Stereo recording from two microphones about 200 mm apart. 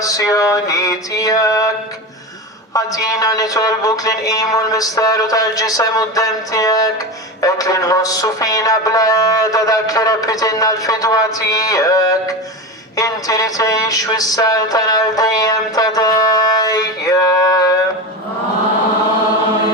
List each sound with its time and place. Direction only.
0.0 s music: 15° left (ahead or behind)
2.7 s music: 15° left (ahead or behind)
13.0 s speech: 15° left (ahead or behind)